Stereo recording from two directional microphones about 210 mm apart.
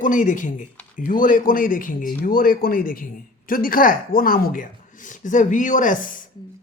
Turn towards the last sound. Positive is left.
turn(degrees=40)  # may be behind; listen again after turning